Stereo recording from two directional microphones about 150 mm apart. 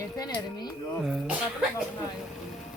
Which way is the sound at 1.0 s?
5° right (ahead or behind).